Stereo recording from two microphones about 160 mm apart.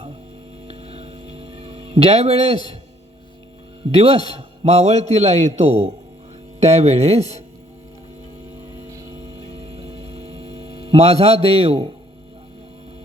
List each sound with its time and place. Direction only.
0.7 s mains hum: 40° right (ahead or behind)
4.0 s a man's voice: 35° right (ahead or behind)
9.5 s hum: 40° right (ahead or behind)